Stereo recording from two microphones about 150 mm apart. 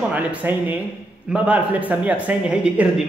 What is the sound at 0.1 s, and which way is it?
Speech, 10° right (ahead or behind).